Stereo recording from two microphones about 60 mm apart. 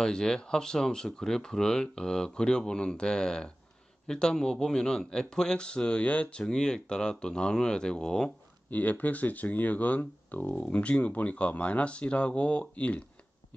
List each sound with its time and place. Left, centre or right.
0.0 s speech: centre
6.4 s speech: centre
8.6 s speech: left